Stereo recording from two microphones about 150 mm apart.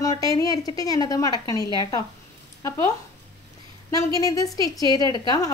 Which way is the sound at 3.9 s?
25° left (ahead or behind).